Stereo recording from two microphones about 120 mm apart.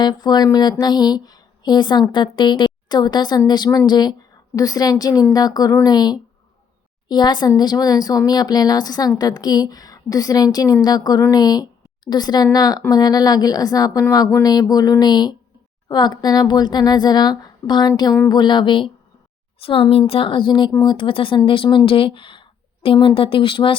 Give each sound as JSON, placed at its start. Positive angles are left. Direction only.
{"t": 0.0, "sound": "a woman's voice", "side_deg": 35}